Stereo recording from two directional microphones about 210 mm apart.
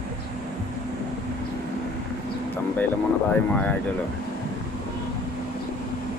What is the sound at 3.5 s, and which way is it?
Speech, 5° left (ahead or behind).